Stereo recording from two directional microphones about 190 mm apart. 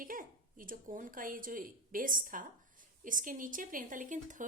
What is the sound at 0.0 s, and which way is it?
A woman's voice, 45° right (ahead or behind).